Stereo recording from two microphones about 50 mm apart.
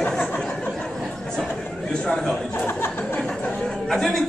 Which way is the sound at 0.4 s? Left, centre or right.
Centre.